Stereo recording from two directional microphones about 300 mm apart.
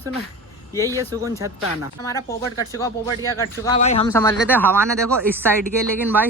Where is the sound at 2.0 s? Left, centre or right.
Centre.